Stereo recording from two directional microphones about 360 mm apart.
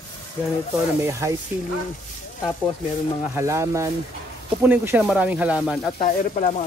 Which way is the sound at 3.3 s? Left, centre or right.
Centre.